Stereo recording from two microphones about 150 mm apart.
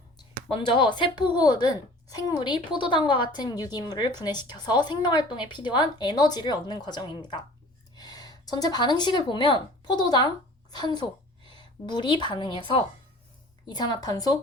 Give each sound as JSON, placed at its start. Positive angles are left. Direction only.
{"t": 0.2, "sound": "a woman's voice", "side_deg": 30}